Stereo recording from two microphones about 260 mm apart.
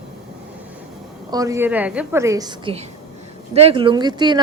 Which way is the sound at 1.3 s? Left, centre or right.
Centre.